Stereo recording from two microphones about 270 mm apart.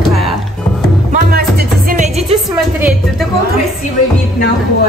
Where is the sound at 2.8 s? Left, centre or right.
Centre.